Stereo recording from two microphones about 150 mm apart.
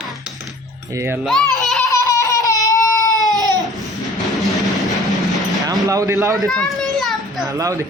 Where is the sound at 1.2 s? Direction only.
Centre (ahead or behind).